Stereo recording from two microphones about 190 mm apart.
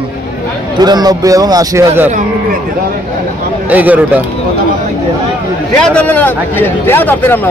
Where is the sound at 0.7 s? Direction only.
20° right (ahead or behind).